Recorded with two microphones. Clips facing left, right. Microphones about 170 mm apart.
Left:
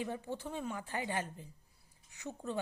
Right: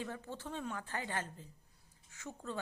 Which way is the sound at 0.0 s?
15° left (ahead or behind).